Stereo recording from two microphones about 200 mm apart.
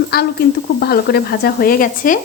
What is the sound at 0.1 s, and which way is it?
Speech, 50° left (ahead or behind).